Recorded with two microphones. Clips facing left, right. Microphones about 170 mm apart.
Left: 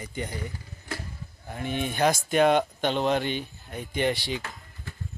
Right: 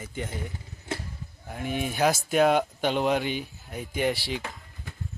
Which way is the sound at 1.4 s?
5° right (ahead or behind).